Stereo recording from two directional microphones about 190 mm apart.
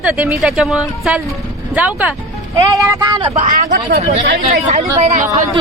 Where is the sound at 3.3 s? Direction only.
40° right (ahead or behind).